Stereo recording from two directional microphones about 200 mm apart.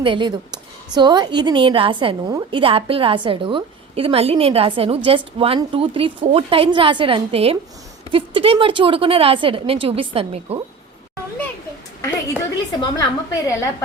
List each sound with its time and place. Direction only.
0.0 s a woman's voice: 25° right (ahead or behind)
12.8 s a woman's voice: 20° left (ahead or behind)